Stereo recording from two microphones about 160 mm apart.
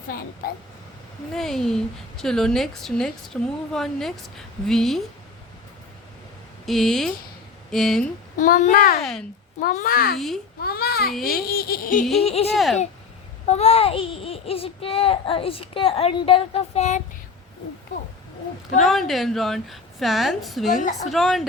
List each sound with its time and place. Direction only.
0.1 s a sound: 65° left (ahead or behind)
1.3 s a woman's voice: centre (ahead or behind)
6.7 s a woman's voice: centre (ahead or behind)
8.4 s a child's voice: 55° left (ahead or behind)
9.0 s a woman's voice: centre (ahead or behind)
9.6 s a child's voice: 60° left (ahead or behind)
10.2 s a woman's voice: centre (ahead or behind)
10.6 s a child's voice: 70° left (ahead or behind)
11.3 s a sound: 70° left (ahead or behind)
12.2 s a child's voice: 40° left (ahead or behind)
12.5 s a woman's voice: centre (ahead or behind)
13.4 s a child's voice: 40° left (ahead or behind)
18.8 s a woman's voice: centre (ahead or behind)